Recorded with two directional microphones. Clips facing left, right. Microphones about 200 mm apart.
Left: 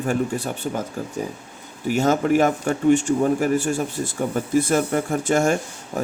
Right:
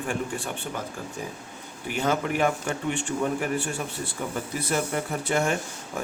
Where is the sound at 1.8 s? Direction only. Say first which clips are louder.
Left 7 dB; 45° left (ahead or behind).